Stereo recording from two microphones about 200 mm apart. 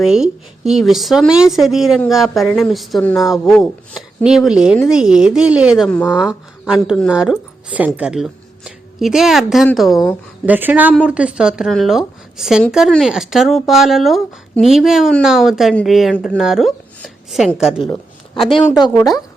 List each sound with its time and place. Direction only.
0.0 s speech: 5° right (ahead or behind)
18.4 s speech: 25° left (ahead or behind)